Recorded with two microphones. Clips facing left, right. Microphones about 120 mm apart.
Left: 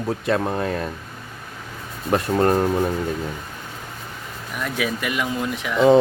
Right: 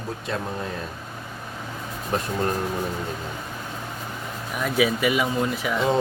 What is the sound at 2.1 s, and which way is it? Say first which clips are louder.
Speech: left 7 dB; 65° left (ahead or behind).